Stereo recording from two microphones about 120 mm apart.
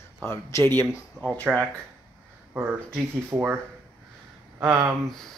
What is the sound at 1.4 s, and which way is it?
Speech, 15° right (ahead or behind).